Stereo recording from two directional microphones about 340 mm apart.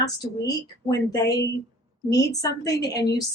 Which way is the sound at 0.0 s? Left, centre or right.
Centre.